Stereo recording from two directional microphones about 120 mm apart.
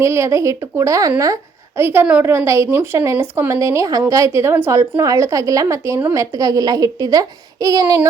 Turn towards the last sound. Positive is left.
turn(degrees=-30)  # may be behind; listen again after turning